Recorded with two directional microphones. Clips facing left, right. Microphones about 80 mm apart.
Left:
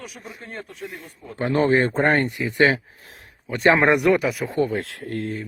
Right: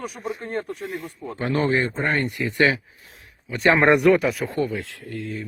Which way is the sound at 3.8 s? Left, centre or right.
Centre.